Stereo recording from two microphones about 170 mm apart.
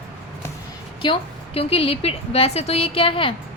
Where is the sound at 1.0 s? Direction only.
30° left (ahead or behind).